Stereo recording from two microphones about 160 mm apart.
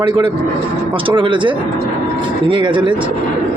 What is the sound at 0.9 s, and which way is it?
Speech, 30° right (ahead or behind).